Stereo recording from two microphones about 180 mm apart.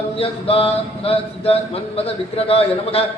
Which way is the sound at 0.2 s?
30° left (ahead or behind).